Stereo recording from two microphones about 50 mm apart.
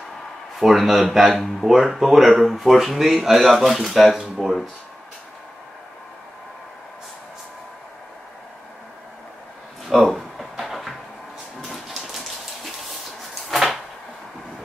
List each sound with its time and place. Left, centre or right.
0.6 s speech: centre
10.1 s a sound: centre
13.3 s drawer open or close: centre